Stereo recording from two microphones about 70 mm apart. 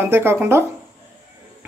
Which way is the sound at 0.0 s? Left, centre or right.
Right.